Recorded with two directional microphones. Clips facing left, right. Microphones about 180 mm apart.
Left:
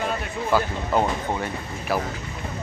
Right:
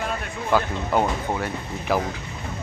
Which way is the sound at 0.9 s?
5° right (ahead or behind).